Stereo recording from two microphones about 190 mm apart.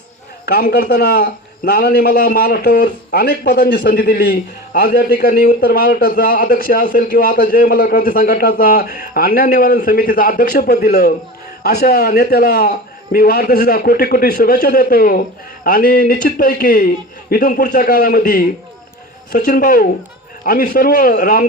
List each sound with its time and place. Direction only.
0.4 s a man's voice: 55° left (ahead or behind)